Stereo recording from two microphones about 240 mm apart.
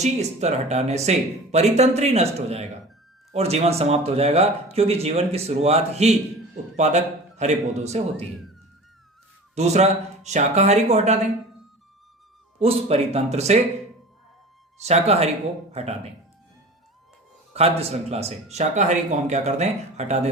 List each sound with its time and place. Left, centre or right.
0.0 s speech: right
9.6 s speech: right
12.5 s speech: right
14.8 s speech: right
17.5 s speech: right